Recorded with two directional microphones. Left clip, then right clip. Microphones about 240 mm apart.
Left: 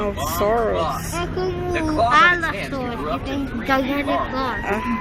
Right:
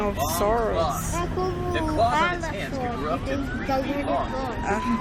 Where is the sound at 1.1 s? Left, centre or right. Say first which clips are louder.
Left 3 dB; left.